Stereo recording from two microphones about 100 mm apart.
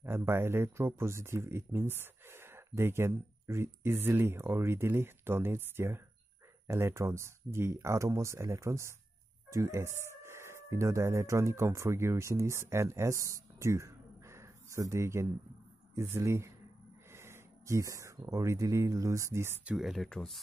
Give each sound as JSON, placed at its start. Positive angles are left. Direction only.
{"t": 0.0, "sound": "speech", "side_deg": -25}
{"t": 19.6, "sound": "speech", "side_deg": -5}